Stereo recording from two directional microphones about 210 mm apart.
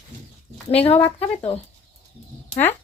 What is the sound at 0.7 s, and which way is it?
Speech, 30° left (ahead or behind).